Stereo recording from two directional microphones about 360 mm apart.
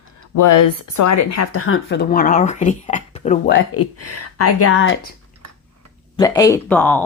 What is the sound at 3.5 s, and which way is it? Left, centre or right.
Speech, left.